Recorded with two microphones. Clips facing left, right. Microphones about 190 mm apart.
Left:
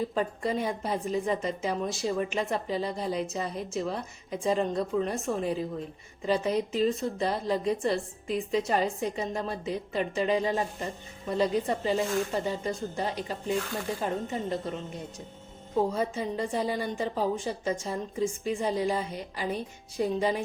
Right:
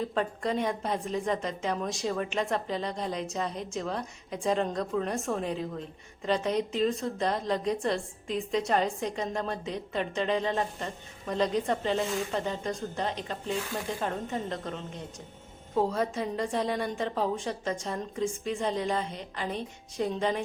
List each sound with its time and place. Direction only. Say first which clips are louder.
0.0 s a woman's voice: left 1 dB; 5° left (ahead or behind)